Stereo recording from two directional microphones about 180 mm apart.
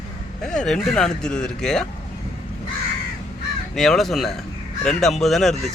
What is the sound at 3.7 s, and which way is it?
Speech, centre (ahead or behind).